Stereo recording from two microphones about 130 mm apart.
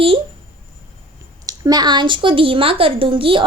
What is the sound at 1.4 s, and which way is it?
A woman's voice, 30° right (ahead or behind).